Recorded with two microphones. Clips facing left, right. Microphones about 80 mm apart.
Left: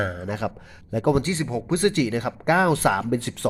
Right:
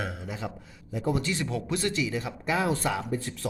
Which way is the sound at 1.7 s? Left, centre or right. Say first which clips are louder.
Left 9 dB; left.